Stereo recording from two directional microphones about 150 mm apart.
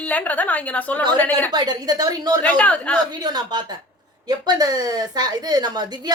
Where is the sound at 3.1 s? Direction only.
30° right (ahead or behind).